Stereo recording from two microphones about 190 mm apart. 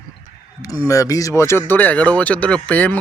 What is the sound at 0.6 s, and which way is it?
Speech, 20° left (ahead or behind).